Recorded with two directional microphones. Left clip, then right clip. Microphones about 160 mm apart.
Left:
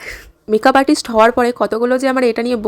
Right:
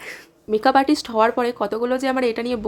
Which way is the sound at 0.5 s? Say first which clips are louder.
Left 5 dB; 45° left (ahead or behind).